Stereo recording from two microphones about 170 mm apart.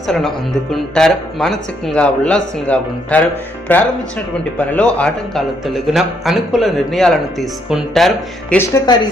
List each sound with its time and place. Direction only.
0.1 s a man's voice: centre (ahead or behind)
8.5 s speech: 20° left (ahead or behind)